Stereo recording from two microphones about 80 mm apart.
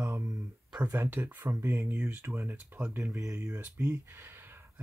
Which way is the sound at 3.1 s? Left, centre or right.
Right.